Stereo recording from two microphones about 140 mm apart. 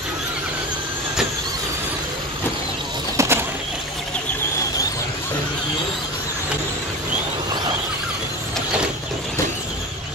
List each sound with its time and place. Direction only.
3.2 s bird: 15° right (ahead or behind)